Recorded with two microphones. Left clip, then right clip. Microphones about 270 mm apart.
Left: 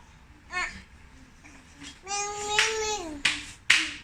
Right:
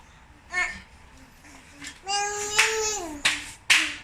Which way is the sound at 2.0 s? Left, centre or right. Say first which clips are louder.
Right 3 dB; centre.